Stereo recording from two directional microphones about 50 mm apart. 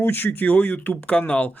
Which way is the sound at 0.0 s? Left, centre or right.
Left.